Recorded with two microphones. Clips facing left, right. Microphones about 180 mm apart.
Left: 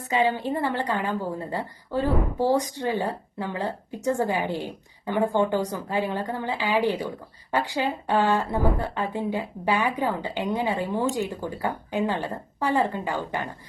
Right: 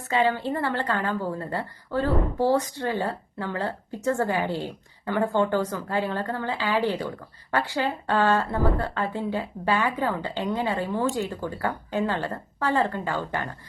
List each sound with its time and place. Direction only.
0.1 s a woman's voice: 15° left (ahead or behind)